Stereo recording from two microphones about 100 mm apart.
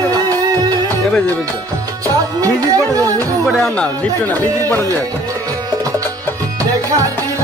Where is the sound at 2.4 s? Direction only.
35° right (ahead or behind).